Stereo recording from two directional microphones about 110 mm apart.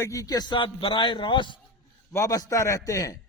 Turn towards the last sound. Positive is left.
turn(degrees=30)  # may be behind; listen again after turning